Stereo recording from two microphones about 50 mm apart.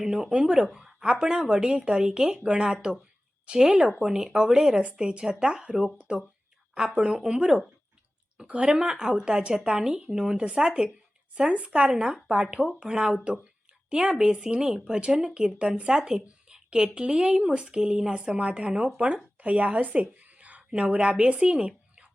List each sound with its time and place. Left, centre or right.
0.0 s a woman's voice: centre
8.6 s speech: centre